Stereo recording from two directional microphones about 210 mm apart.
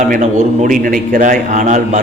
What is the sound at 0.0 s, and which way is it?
A man's voice, 35° right (ahead or behind).